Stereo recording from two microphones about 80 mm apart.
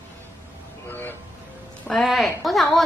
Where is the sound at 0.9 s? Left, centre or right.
Left.